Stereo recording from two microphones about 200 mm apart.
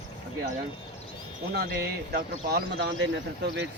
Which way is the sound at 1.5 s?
55° right (ahead or behind).